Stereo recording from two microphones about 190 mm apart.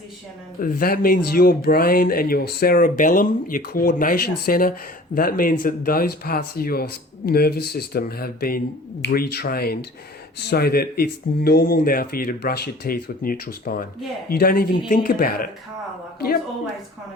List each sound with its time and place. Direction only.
0.6 s speech: 50° left (ahead or behind)